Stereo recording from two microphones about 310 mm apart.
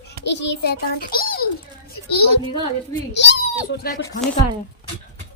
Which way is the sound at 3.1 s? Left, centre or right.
Left.